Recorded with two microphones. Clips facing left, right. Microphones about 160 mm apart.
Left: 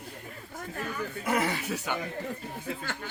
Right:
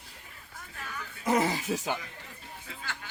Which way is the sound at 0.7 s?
50° left (ahead or behind).